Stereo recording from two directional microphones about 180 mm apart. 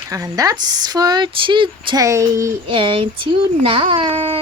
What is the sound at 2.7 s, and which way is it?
Speech, 30° right (ahead or behind).